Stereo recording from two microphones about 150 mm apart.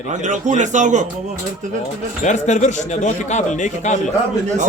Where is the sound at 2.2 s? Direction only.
55° left (ahead or behind).